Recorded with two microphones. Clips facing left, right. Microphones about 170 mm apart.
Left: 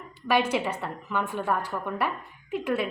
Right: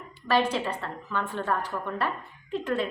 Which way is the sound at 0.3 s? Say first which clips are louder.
Left 1 dB; 15° left (ahead or behind).